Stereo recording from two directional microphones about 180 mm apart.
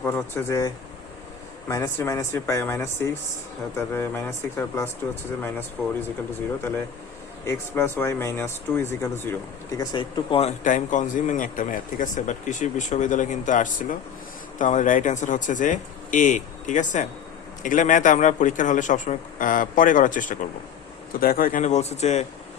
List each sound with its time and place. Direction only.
0.0 s speech: 15° left (ahead or behind)
7.4 s speech: 15° left (ahead or behind); by 10.5 s 30° left (ahead or behind)
10.6 s speech: 45° left (ahead or behind)